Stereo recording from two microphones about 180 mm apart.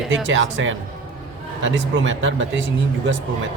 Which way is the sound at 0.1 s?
90° right.